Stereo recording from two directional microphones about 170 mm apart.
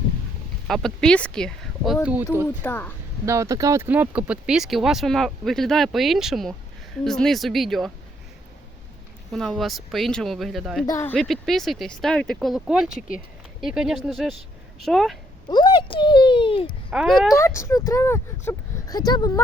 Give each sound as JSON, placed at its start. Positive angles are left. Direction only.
{"t": 0.7, "sound": "speech", "side_deg": 0}
{"t": 2.6, "sound": "speech", "side_deg": 15}
{"t": 3.2, "sound": "speech", "side_deg": -15}
{"t": 9.3, "sound": "speech", "side_deg": 5}
{"t": 10.8, "sound": "speech", "side_deg": 15}
{"t": 11.2, "sound": "speech", "side_deg": 0}
{"t": 15.4, "sound": "speech", "side_deg": 25}
{"t": 16.9, "sound": "speech", "side_deg": 0}
{"t": 17.3, "sound": "speech", "side_deg": 15}